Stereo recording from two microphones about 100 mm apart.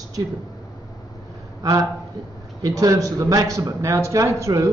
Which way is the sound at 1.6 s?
40° right (ahead or behind).